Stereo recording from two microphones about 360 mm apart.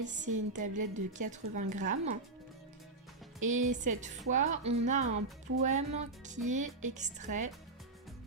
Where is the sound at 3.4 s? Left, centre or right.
Right.